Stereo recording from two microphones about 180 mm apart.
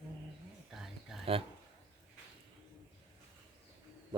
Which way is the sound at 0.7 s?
Centre (ahead or behind).